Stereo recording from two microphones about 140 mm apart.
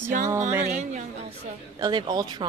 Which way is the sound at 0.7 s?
60° right (ahead or behind).